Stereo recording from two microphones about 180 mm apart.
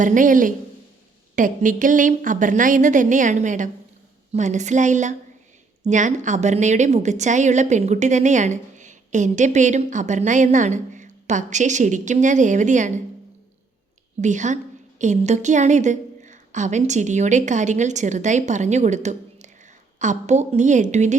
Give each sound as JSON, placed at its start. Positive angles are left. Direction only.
{"t": 0.0, "sound": "a woman's voice", "side_deg": -45}
{"t": 14.2, "sound": "a woman's voice", "side_deg": -40}